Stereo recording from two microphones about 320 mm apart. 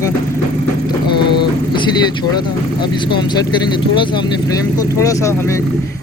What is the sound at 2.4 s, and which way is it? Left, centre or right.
Speech, centre.